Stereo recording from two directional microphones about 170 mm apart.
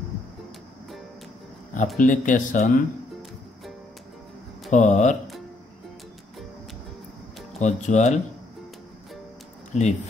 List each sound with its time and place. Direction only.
2.0 s speech: 50° left (ahead or behind)
4.6 s speech: 45° left (ahead or behind)
7.6 s speech: 45° left (ahead or behind)
9.7 s speech: 45° left (ahead or behind)